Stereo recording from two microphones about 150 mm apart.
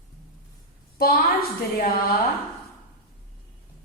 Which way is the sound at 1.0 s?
80° left.